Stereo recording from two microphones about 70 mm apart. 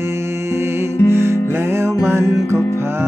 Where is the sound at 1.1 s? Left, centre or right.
Right.